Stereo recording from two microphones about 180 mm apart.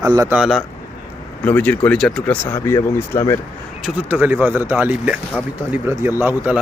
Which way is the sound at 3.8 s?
10° right (ahead or behind).